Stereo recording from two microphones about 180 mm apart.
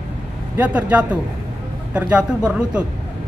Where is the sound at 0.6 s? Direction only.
10° right (ahead or behind).